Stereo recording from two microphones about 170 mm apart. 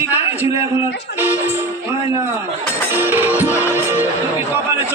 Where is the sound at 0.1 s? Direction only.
10° right (ahead or behind).